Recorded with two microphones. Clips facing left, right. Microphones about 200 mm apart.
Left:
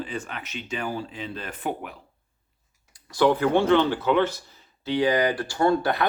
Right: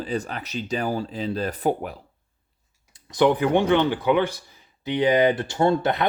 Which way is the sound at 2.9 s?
20° right (ahead or behind).